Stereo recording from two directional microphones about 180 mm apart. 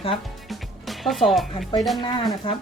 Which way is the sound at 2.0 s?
25° left (ahead or behind).